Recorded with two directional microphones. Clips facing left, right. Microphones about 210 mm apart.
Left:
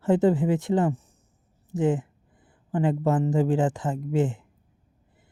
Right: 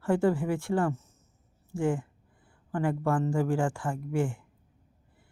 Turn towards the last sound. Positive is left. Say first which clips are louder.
# left 5 dB
turn(degrees=20)  # may be behind; listen again after turning